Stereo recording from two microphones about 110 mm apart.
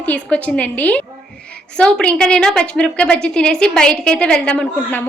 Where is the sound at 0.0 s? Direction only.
10° left (ahead or behind).